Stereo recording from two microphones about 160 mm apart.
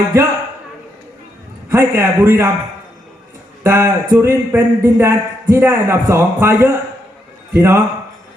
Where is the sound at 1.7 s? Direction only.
15° right (ahead or behind).